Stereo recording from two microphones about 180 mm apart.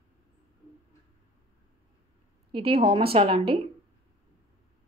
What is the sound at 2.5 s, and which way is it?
A woman's voice, 30° right (ahead or behind).